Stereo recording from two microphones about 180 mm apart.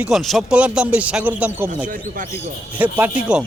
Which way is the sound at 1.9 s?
45° right (ahead or behind).